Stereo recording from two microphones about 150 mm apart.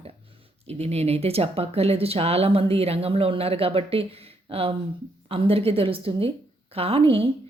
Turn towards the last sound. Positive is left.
turn(degrees=-40)  # may be behind; listen again after turning